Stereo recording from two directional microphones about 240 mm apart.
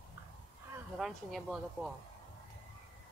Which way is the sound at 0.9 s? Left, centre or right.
Centre.